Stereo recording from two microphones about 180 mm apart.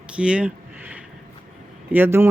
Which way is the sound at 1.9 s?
10° right (ahead or behind).